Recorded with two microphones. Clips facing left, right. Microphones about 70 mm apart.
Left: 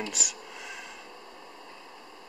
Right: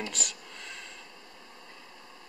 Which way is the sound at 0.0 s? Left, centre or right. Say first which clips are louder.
Left 2 dB; centre.